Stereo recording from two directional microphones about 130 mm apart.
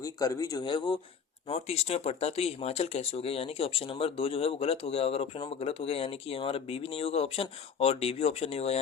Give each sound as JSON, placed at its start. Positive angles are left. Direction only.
{"t": 0.0, "sound": "speech", "side_deg": 25}
{"t": 1.5, "sound": "speech", "side_deg": 55}